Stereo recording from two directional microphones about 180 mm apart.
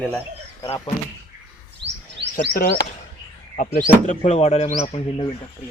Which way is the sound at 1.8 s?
75° right (ahead or behind).